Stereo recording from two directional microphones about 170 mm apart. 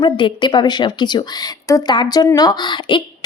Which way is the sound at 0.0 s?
30° left (ahead or behind).